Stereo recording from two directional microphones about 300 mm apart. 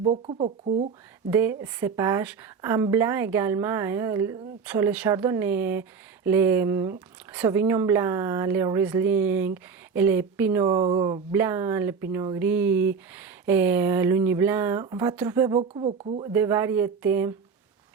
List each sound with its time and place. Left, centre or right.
0.0 s speech: centre
1.3 s speech: centre
16.3 s speech: centre